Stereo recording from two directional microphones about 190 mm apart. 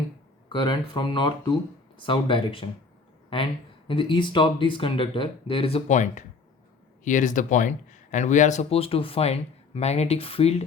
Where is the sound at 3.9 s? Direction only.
25° left (ahead or behind).